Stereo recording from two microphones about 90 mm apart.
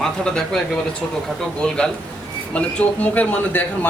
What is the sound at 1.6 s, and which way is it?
Speech, 10° left (ahead or behind).